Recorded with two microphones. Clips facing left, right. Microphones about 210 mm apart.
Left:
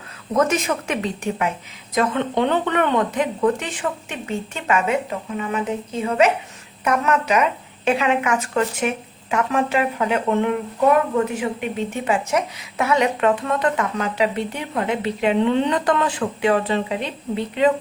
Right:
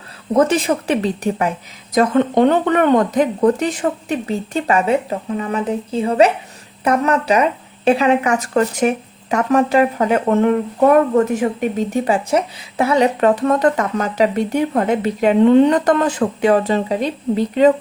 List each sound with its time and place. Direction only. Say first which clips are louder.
0.3 s a woman's voice: right 5 dB; 30° right (ahead or behind)